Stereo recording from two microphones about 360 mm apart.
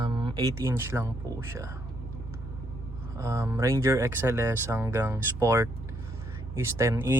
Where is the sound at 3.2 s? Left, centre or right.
Centre.